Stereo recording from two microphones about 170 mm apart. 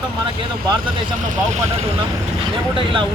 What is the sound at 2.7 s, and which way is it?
Speech, 30° right (ahead or behind).